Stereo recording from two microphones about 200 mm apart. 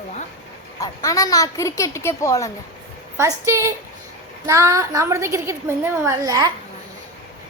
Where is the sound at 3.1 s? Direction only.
15° right (ahead or behind).